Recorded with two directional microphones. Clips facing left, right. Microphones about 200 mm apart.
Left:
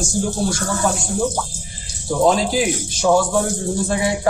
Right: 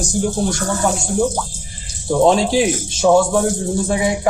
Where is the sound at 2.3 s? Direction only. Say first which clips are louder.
Right 2 dB; 25° right (ahead or behind).